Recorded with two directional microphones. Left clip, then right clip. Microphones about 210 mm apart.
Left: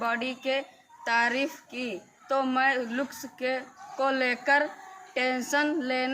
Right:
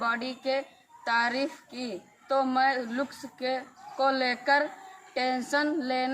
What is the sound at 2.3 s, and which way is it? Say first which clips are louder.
Speech: even; 10° left (ahead or behind).